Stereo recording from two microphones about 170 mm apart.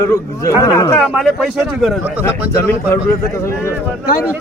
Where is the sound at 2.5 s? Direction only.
15° left (ahead or behind).